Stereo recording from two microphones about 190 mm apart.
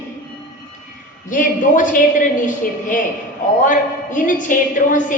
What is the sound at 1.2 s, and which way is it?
Speech, 45° left (ahead or behind).